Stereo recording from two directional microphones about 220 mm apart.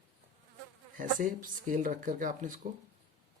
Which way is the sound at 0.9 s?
35° right (ahead or behind).